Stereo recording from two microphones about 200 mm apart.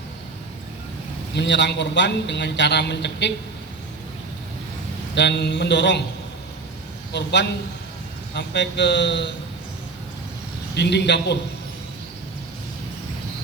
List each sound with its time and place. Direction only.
1.4 s a man's voice: 60° left (ahead or behind)
5.1 s a man's voice: 60° left (ahead or behind)
7.1 s a man's voice: 60° left (ahead or behind)
10.8 s a man's voice: 60° left (ahead or behind)